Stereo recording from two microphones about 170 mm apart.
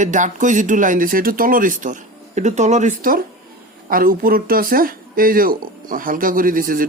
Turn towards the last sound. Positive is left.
turn(degrees=-55)  # may be behind; listen again after turning